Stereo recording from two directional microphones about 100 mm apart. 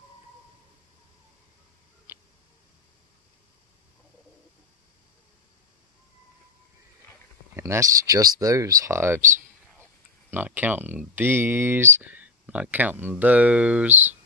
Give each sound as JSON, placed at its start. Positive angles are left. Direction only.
{"t": 2.1, "sound": "tick-tock", "side_deg": -20}
{"t": 7.5, "sound": "speech", "side_deg": -25}
{"t": 10.3, "sound": "speech", "side_deg": -20}